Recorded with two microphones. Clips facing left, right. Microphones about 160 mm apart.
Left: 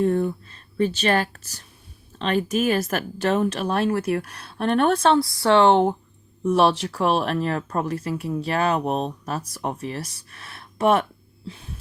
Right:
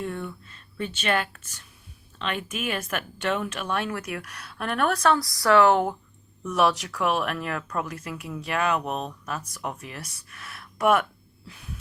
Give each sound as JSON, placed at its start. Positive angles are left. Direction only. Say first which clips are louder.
{"t": 0.0, "sound": "speech", "louder": "left 11 dB", "side_deg": 35}
{"t": 11.4, "sound": "music", "louder": "left 9 dB", "side_deg": 30}